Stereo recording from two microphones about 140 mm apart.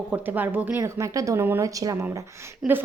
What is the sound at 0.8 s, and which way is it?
A woman's voice, 20° right (ahead or behind).